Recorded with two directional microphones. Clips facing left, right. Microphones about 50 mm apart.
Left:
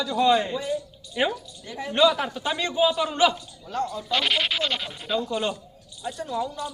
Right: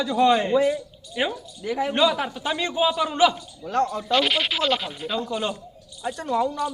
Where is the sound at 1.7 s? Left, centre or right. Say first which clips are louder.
Right 9 dB; right.